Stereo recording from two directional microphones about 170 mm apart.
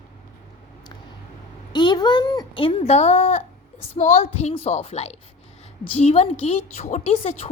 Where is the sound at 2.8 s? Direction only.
40° left (ahead or behind).